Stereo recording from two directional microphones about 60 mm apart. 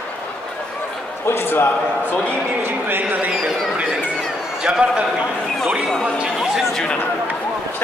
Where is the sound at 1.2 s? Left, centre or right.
Left.